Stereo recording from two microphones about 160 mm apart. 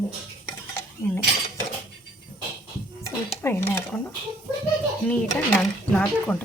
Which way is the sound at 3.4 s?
15° left (ahead or behind).